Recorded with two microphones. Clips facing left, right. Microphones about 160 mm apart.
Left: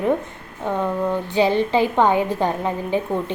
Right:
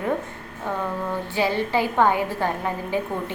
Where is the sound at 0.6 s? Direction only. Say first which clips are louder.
Left 5 dB; 20° left (ahead or behind).